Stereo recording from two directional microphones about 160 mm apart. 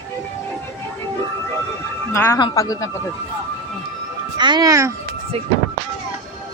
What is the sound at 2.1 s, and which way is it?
Speech, 15° left (ahead or behind).